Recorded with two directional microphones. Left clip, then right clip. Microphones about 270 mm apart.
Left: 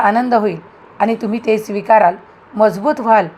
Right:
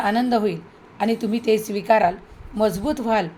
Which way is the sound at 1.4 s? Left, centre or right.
Centre.